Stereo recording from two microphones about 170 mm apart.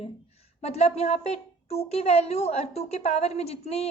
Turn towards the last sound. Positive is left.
turn(degrees=40)  # may be behind; listen again after turning